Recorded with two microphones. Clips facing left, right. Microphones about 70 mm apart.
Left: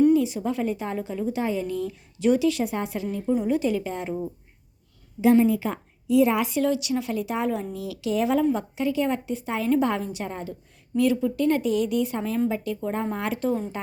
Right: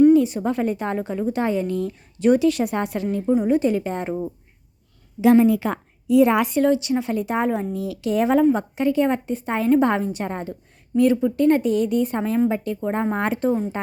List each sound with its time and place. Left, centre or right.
0.1 s a woman's voice: right
5.2 s a woman's voice: right